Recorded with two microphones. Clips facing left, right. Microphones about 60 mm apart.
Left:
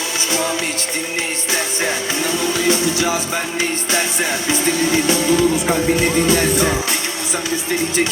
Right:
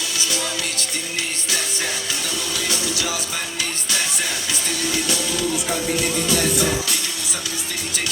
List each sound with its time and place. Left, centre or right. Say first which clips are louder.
0.3 s music: left 8 dB; left
2.6 s music: left 8 dB; left